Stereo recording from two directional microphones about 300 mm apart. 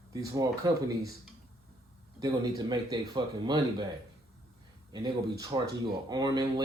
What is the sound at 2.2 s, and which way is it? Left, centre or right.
Speech, centre.